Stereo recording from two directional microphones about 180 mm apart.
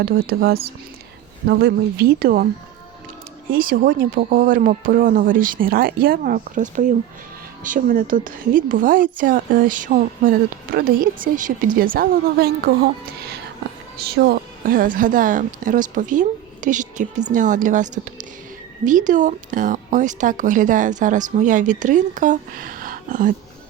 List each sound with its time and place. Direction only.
0.0 s speech: 60° right (ahead or behind)
3.5 s speech: 50° right (ahead or behind)
14.0 s speech: 60° right (ahead or behind)